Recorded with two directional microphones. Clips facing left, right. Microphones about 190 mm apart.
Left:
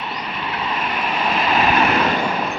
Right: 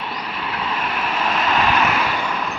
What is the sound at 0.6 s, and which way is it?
Vehicle, 10° left (ahead or behind).